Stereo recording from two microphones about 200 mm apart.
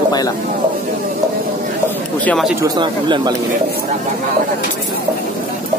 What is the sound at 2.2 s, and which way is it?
Speech, 5° left (ahead or behind).